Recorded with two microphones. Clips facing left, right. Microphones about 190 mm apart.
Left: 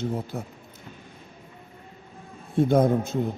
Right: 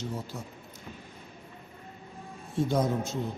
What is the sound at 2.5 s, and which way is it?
Speech, 55° left (ahead or behind).